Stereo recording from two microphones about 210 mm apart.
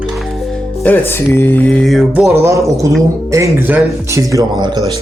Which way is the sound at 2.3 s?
15° right (ahead or behind).